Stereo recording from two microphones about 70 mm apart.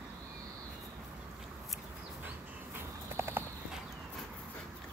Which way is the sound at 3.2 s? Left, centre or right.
Right.